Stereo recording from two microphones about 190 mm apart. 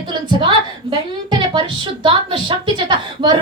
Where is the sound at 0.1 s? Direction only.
25° right (ahead or behind).